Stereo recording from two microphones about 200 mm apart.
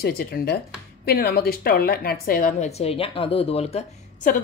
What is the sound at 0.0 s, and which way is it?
A woman's voice, 50° left (ahead or behind).